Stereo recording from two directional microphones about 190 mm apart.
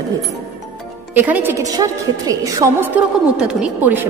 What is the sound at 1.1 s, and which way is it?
A woman's voice, 10° right (ahead or behind).